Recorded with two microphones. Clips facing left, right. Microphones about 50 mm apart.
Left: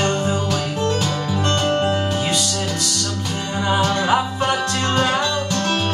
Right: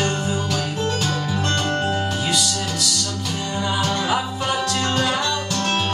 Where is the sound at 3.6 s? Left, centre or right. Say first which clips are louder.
Left 5 dB; left.